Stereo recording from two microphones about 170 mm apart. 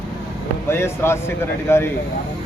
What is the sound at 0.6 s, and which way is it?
Speech, 15° left (ahead or behind).